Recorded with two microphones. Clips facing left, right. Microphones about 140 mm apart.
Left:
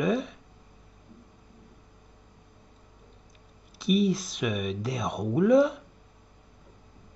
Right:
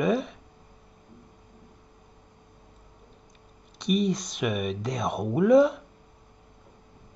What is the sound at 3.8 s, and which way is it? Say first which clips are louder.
Speech: left 1 dB; 5° left (ahead or behind).